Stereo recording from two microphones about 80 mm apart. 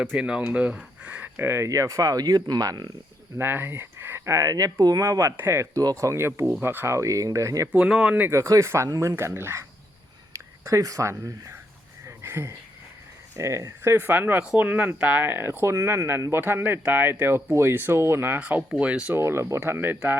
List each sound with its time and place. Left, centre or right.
0.0 s speech: centre
1.0 s a sound: centre
1.4 s speech: right
3.3 s speech: right
4.4 s speech: right
7.7 s speech: centre
8.3 s speech: right
10.3 s a sound: right
11.1 s speech: right
12.0 s a sound: right
13.3 s speech: right
13.9 s speech: right
19.1 s speech: right